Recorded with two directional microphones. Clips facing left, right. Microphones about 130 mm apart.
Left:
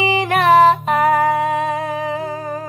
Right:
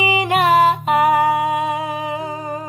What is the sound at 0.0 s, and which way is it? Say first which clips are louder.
Music: left 1 dB; 15° right (ahead or behind).